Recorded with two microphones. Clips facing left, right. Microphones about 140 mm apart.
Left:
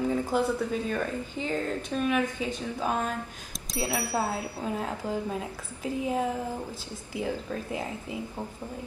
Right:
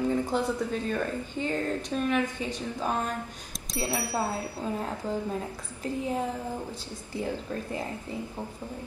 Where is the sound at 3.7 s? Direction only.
Centre (ahead or behind).